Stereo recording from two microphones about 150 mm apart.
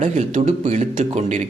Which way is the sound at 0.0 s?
55° right (ahead or behind).